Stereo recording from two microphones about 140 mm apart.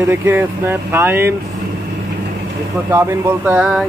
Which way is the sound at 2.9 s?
15° right (ahead or behind).